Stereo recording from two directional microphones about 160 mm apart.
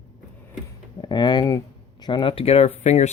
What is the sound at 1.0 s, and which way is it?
Speech, 25° left (ahead or behind).